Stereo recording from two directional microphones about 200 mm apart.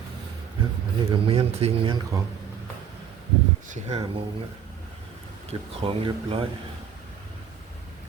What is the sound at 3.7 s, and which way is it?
Speech, 30° right (ahead or behind).